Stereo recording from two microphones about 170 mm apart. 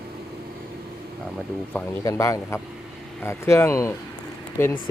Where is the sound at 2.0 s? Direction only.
20° left (ahead or behind).